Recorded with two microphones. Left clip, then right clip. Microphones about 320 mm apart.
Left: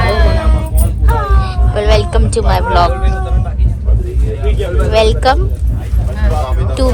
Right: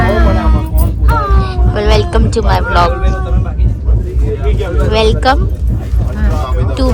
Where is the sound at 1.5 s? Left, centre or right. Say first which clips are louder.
Even; centre.